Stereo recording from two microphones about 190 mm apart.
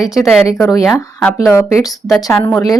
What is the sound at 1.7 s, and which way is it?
Speech, 20° left (ahead or behind).